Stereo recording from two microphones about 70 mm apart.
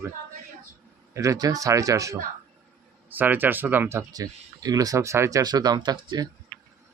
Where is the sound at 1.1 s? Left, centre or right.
Right.